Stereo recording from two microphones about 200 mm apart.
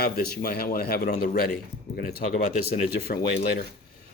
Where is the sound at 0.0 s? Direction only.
50° left (ahead or behind).